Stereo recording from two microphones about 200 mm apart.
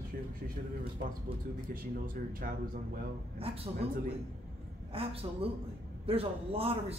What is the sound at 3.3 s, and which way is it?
Speech, 30° right (ahead or behind).